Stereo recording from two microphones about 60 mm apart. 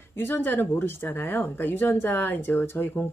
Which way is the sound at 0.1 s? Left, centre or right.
Left.